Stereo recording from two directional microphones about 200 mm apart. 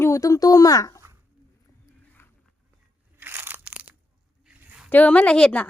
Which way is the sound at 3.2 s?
10° right (ahead or behind).